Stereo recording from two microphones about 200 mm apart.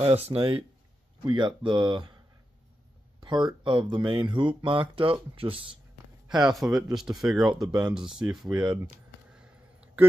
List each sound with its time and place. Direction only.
0.0 s speech: 30° right (ahead or behind)
3.2 s speech: 20° right (ahead or behind)
6.2 s speech: centre (ahead or behind)
8.9 s a sound: 5° right (ahead or behind)